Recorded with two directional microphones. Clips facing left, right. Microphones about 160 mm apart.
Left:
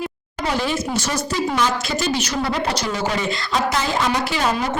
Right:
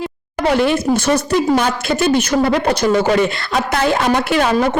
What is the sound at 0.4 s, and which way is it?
A man's voice, 60° right (ahead or behind).